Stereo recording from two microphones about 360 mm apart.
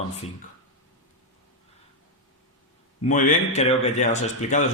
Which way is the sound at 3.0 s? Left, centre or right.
Left.